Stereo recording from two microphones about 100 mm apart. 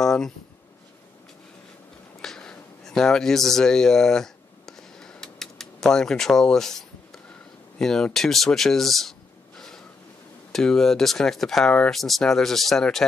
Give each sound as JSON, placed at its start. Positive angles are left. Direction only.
{"t": 0.0, "sound": "speech", "side_deg": 5}
{"t": 2.2, "sound": "a sound", "side_deg": 5}
{"t": 7.8, "sound": "speech", "side_deg": 5}
{"t": 10.5, "sound": "speech", "side_deg": 5}